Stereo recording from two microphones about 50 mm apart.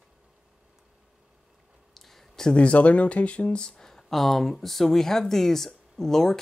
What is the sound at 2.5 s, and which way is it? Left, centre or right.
Speech, left.